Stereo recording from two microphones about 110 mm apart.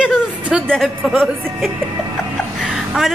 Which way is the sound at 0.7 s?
Centre (ahead or behind).